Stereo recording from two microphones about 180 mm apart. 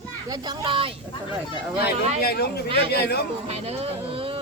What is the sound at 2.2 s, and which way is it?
Speech, 60° left (ahead or behind).